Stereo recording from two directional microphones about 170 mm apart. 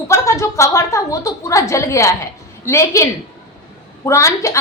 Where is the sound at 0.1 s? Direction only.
15° left (ahead or behind).